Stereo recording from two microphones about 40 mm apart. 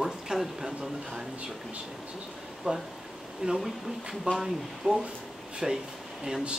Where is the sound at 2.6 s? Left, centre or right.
Right.